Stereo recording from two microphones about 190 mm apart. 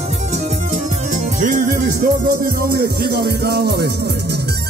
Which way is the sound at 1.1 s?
45° right (ahead or behind).